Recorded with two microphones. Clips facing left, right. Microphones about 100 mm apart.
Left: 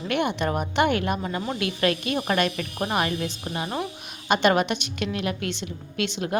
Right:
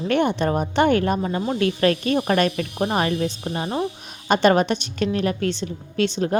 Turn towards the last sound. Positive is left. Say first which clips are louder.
# right 6 dB
turn(degrees=-35)  # may be behind; listen again after turning